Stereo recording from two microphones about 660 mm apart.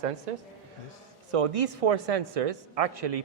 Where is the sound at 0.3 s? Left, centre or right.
Right.